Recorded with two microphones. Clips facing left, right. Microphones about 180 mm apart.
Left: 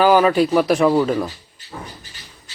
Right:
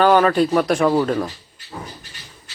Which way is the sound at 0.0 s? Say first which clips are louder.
Left 1 dB; 5° left (ahead or behind).